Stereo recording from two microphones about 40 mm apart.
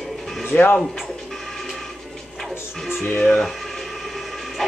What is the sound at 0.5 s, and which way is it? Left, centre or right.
Speech, left.